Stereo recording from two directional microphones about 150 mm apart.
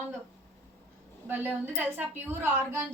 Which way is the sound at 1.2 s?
10° right (ahead or behind).